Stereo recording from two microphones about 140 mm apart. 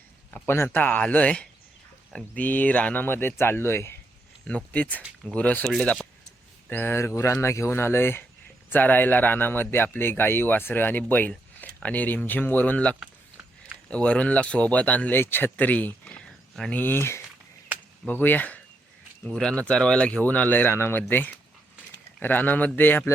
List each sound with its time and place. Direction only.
0.3 s speech: 15° left (ahead or behind)
13.0 s a sound: 10° right (ahead or behind)
13.9 s speech: 10° left (ahead or behind)